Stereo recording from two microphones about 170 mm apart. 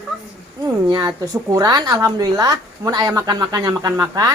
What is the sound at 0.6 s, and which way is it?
A woman's voice, 25° right (ahead or behind).